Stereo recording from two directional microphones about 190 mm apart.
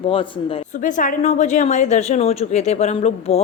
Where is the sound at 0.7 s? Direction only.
40° left (ahead or behind).